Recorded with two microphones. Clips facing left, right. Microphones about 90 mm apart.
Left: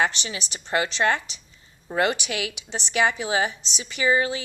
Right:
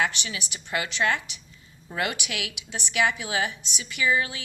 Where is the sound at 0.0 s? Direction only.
30° left (ahead or behind).